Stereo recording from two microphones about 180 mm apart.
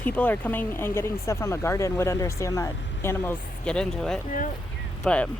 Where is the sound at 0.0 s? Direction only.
10° left (ahead or behind).